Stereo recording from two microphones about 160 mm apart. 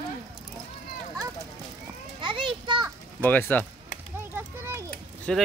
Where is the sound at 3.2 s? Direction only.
10° left (ahead or behind).